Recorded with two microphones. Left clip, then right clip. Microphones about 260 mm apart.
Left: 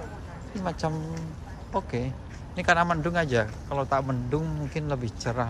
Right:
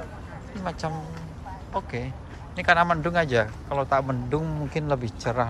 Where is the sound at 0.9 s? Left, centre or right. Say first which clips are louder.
Left 1 dB; centre.